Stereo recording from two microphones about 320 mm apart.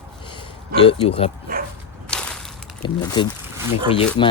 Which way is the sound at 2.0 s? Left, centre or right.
Centre.